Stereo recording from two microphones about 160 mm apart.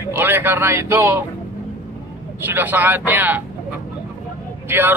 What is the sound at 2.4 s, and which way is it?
A man's voice, 10° right (ahead or behind).